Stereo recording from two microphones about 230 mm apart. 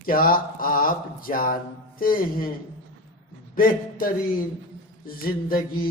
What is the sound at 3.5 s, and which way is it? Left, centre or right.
A man's voice, left.